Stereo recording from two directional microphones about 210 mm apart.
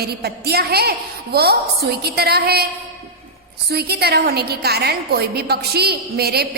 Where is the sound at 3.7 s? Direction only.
50° right (ahead or behind).